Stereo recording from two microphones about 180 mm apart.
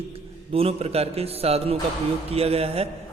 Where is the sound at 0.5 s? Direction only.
30° right (ahead or behind).